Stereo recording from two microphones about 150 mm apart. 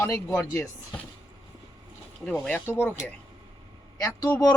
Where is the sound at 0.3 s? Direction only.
10° left (ahead or behind).